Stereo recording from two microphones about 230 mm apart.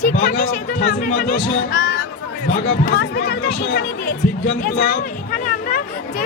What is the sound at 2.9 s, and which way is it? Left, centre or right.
Speech, left.